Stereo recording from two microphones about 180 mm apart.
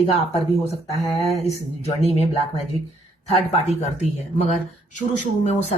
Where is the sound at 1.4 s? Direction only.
35° left (ahead or behind).